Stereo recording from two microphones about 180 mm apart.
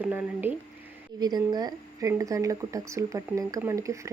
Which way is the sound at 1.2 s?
20° right (ahead or behind).